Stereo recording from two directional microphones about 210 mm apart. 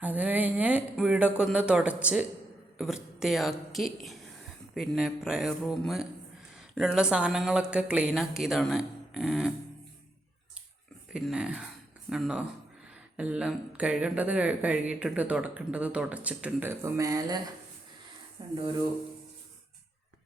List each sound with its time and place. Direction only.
0.0 s speech: 5° right (ahead or behind)
11.1 s speech: 5° right (ahead or behind); by 18.5 s 25° right (ahead or behind)